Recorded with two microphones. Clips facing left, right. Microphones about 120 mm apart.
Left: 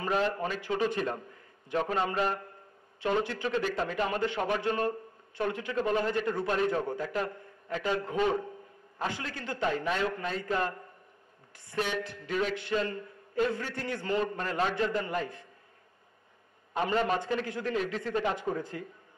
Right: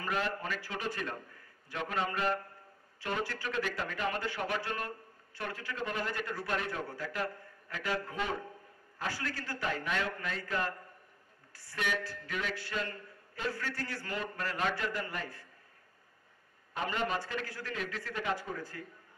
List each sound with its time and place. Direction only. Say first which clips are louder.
0.0 s a man's voice: left 6 dB; 25° left (ahead or behind)
12.3 s music: left 8 dB; 30° left (ahead or behind)
12.5 s a man's voice: left 7 dB; 20° left (ahead or behind)
16.7 s a man's voice: left 6 dB; 30° left (ahead or behind)